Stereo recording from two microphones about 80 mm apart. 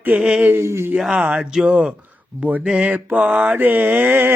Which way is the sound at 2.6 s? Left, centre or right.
Centre.